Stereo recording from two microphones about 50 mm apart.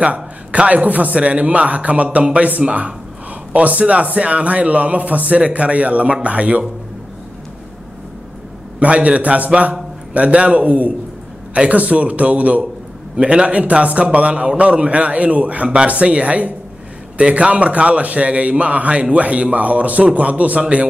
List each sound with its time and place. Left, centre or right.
0.0 s a man's voice: right
8.7 s a man's voice: right